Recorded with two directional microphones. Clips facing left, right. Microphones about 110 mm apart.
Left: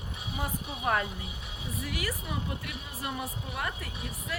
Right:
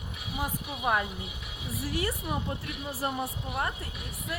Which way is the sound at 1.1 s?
30° left (ahead or behind).